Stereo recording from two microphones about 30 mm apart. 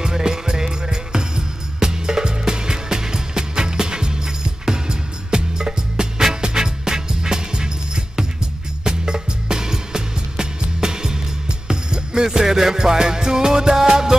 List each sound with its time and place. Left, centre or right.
0.0 s music: right